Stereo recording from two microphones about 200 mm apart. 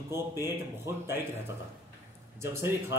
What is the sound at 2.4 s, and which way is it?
Speech, 10° right (ahead or behind).